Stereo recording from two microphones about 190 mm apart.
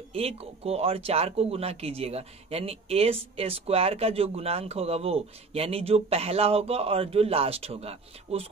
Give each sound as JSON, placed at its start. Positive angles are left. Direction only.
{"t": 0.1, "sound": "speech", "side_deg": -30}